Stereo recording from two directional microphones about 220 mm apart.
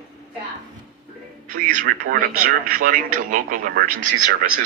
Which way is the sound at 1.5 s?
40° right (ahead or behind).